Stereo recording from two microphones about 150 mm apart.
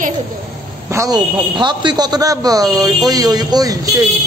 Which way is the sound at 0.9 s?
25° right (ahead or behind).